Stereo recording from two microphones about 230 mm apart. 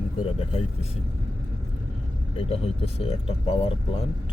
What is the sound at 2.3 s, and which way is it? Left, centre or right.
Speech, left.